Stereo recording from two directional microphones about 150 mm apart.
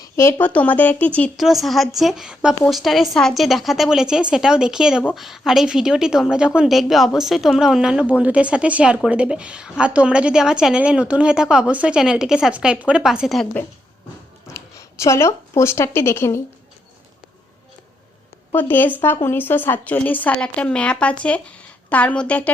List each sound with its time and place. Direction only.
0.0 s a woman's voice: 20° left (ahead or behind)
1.4 s a woman's voice: centre (ahead or behind)
14.4 s speech: 20° left (ahead or behind)
18.5 s a woman's voice: 15° left (ahead or behind)